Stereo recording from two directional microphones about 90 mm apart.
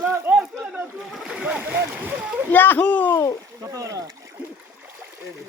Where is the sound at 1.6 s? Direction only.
20° right (ahead or behind).